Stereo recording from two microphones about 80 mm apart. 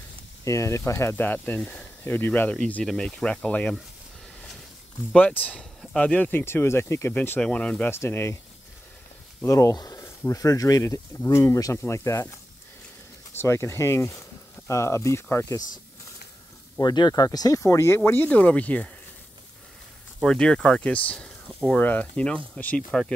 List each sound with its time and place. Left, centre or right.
0.5 s speech: left
1.1 s speech: left
2.5 s speech: centre
5.1 s speech: centre
5.6 s speech: centre
6.4 s speech: left
7.2 s speech: centre
7.9 s speech: left
9.5 s speech: left
13.4 s speech: left
16.8 s speech: left; by 18.9 s centre
20.2 s speech: centre
22.8 s speech: centre